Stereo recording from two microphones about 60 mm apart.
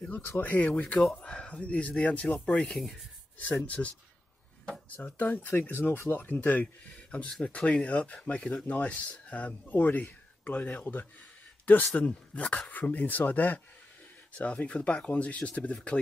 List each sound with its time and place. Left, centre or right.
0.0 s speech: left